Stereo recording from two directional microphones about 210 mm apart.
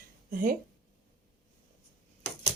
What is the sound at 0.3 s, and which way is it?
Speech, 40° right (ahead or behind).